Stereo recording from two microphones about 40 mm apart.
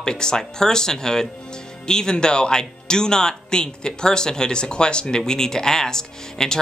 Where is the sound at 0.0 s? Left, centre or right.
Centre.